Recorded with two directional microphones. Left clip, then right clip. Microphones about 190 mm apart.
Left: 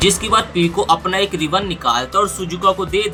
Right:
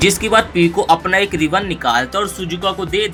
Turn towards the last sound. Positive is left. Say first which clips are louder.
# left 2 dB
turn(degrees=-10)  # may be behind; listen again after turning